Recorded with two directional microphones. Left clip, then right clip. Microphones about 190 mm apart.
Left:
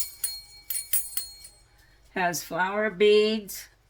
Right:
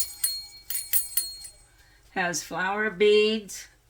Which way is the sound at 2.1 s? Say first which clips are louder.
Left 2 dB; 30° left (ahead or behind).